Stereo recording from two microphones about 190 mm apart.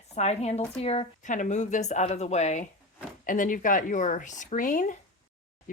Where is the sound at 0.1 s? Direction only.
35° left (ahead or behind).